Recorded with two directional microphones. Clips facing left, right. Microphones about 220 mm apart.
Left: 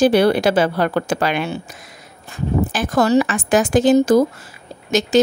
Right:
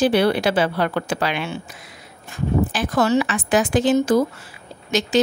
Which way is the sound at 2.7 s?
45° left (ahead or behind).